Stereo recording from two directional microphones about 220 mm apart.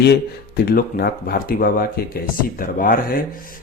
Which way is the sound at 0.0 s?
45° left (ahead or behind).